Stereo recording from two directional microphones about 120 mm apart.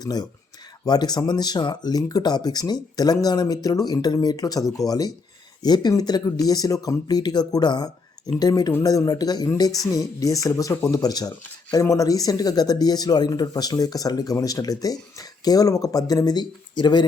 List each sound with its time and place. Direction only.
0.0 s speech: 35° left (ahead or behind)